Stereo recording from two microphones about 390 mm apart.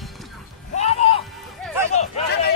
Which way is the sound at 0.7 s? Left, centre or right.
Centre.